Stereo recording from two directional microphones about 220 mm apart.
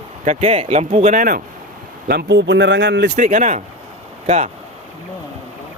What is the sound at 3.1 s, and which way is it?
Speech, 35° right (ahead or behind).